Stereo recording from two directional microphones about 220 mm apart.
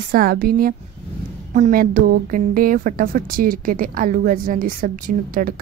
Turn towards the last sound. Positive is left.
turn(degrees=-40)  # may be behind; listen again after turning